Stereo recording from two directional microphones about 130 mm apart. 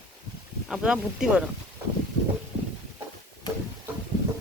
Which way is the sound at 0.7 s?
5° right (ahead or behind).